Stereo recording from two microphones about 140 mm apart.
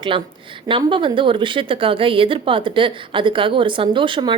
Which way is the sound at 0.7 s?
35° right (ahead or behind).